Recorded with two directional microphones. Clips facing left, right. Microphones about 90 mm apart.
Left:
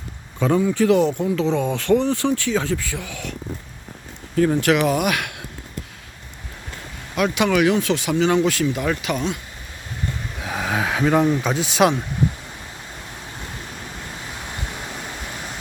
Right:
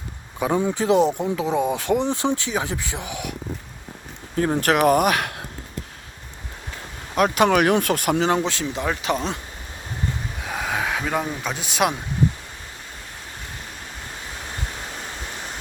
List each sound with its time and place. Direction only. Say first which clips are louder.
0.3 s speech: left 3 dB; 15° right (ahead or behind)
4.4 s speech: left 2 dB; 35° right (ahead or behind)
7.2 s speech: right 1 dB; 40° right (ahead or behind)
8.2 s speech: left 3 dB; 35° right (ahead or behind)
10.4 s speech: left 2 dB; centre (ahead or behind)